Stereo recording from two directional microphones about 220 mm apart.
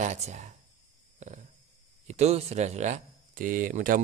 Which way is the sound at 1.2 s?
35° right (ahead or behind).